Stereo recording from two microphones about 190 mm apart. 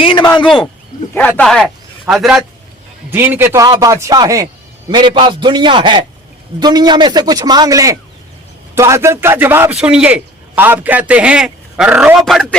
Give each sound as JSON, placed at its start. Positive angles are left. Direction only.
{"t": 0.0, "sound": "speech", "side_deg": 25}
{"t": 1.1, "sound": "a man's voice", "side_deg": 10}